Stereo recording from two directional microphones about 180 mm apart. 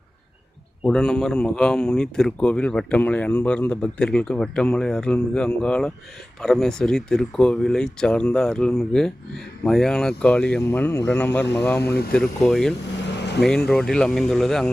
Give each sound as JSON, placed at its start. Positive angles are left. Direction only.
{"t": 0.9, "sound": "speech", "side_deg": 5}
{"t": 11.8, "sound": "speech", "side_deg": 65}
{"t": 12.1, "sound": "speech", "side_deg": 0}
{"t": 13.1, "sound": "vehicle", "side_deg": 70}
{"t": 13.7, "sound": "speech", "side_deg": 5}